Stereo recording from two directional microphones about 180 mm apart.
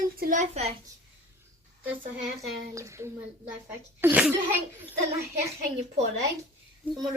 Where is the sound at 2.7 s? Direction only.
15° right (ahead or behind).